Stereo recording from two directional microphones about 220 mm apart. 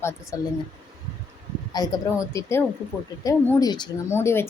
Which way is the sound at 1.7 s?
15° left (ahead or behind).